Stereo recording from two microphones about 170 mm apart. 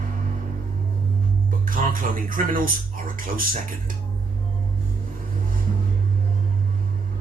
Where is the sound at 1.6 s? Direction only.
55° right (ahead or behind).